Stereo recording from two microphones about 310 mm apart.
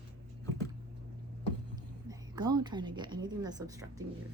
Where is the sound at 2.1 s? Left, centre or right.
Centre.